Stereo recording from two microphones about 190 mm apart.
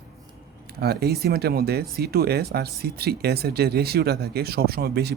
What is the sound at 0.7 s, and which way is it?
Speech, 55° right (ahead or behind).